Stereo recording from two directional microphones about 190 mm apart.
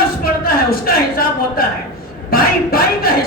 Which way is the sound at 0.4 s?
50° left (ahead or behind).